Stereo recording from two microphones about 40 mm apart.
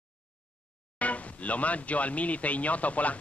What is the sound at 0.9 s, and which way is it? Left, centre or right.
Speech, left.